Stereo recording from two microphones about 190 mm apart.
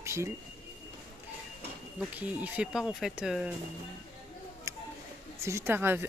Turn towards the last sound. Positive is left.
turn(degrees=-10)  # may be behind; listen again after turning